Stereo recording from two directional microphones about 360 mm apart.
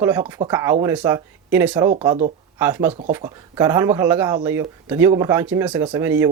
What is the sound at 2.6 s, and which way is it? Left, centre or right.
Speech, centre.